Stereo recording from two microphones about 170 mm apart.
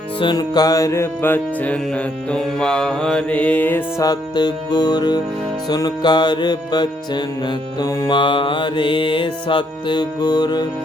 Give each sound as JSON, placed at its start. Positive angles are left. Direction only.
{"t": 0.2, "sound": "music", "side_deg": 25}